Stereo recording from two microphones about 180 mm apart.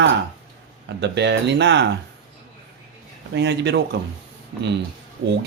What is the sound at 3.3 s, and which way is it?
Speech, 70° right (ahead or behind).